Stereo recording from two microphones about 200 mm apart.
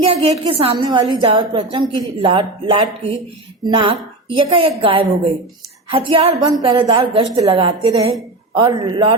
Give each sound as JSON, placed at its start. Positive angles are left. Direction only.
{"t": 0.0, "sound": "a woman's voice", "side_deg": -30}